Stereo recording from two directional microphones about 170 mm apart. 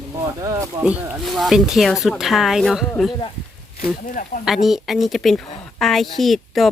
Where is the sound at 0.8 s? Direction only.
10° right (ahead or behind).